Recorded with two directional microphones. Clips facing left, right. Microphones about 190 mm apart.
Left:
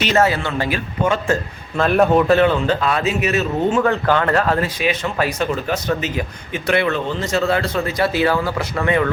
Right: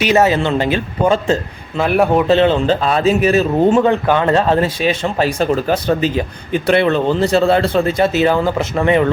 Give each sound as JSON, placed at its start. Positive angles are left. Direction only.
{"t": 0.0, "sound": "speech", "side_deg": -15}
{"t": 1.8, "sound": "speech", "side_deg": -15}
{"t": 3.8, "sound": "speech", "side_deg": -15}